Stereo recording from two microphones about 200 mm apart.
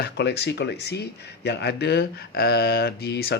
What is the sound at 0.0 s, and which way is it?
Speech, 55° left (ahead or behind).